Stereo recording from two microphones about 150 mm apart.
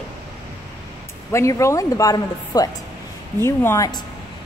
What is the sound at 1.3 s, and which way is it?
A woman's voice, 20° left (ahead or behind).